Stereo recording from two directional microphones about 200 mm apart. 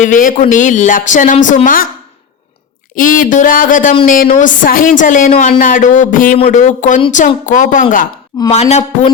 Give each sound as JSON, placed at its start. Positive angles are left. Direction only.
{"t": 0.0, "sound": "a woman's voice", "side_deg": 40}
{"t": 2.9, "sound": "a woman's voice", "side_deg": 40}